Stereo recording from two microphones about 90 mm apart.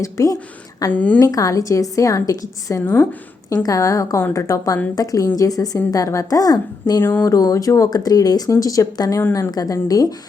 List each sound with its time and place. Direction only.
0.0 s a woman's voice: 35° left (ahead or behind)
0.9 s a woman's voice: 15° left (ahead or behind)
1.2 s a woman's voice: 40° left (ahead or behind)
7.0 s a sound: 20° left (ahead or behind)
7.3 s a woman's voice: 40° left (ahead or behind)